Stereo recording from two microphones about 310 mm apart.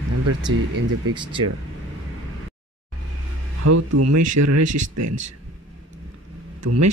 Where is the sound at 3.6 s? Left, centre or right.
Right.